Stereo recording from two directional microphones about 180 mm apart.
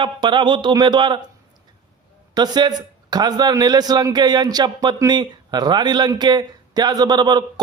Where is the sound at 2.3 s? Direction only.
25° right (ahead or behind).